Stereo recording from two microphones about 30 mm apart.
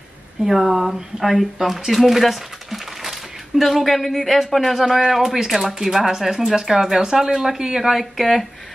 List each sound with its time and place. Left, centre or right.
0.5 s speech: centre
8.0 s speech: centre